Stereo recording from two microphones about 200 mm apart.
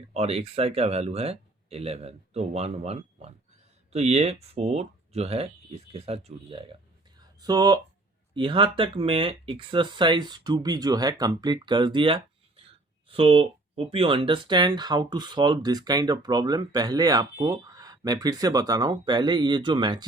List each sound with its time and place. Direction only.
0.1 s speech: 30° right (ahead or behind)
7.2 s a sound: 20° right (ahead or behind)
8.4 s speech: 25° right (ahead or behind)